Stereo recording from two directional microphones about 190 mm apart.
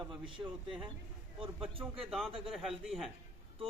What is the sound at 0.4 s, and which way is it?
Speech, 15° right (ahead or behind).